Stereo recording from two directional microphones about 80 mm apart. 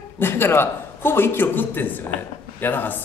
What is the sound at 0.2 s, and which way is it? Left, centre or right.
A man's voice, left.